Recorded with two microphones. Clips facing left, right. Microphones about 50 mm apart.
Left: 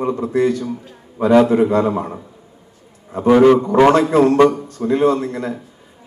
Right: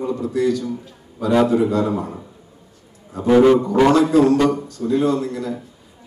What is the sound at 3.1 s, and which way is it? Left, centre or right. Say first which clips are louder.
A man's voice: left 2 dB; left.